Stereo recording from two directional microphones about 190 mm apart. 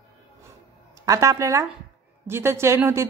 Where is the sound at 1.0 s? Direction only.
15° right (ahead or behind).